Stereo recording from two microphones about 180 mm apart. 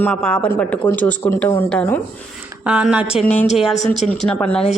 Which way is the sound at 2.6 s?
5° right (ahead or behind).